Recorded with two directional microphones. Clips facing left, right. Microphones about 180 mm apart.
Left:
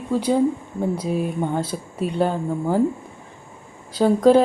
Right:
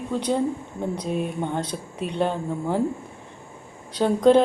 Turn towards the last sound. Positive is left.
turn(degrees=5)  # may be behind; listen again after turning